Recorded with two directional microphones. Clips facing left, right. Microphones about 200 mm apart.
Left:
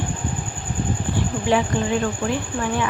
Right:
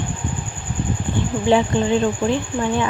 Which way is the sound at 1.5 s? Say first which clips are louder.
Right 4 dB; 25° right (ahead or behind).